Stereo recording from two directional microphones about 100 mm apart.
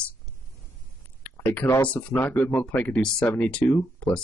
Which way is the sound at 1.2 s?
15° left (ahead or behind).